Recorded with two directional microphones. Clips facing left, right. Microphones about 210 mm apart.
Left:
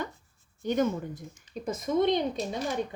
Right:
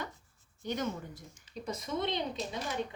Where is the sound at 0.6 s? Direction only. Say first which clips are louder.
Left 8 dB; 50° left (ahead or behind).